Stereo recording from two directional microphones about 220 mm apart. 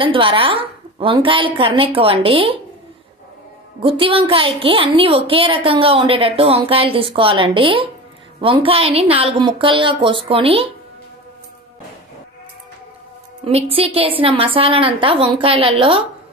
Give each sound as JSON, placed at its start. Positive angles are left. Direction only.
{"t": 0.0, "sound": "a woman's voice", "side_deg": -25}
{"t": 3.8, "sound": "a woman's voice", "side_deg": -25}
{"t": 13.4, "sound": "a woman's voice", "side_deg": -25}